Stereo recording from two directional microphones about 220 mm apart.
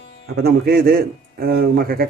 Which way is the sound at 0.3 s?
45° right (ahead or behind).